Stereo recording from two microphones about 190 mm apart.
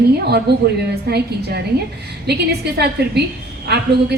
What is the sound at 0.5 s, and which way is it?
A woman's voice, 60° right (ahead or behind).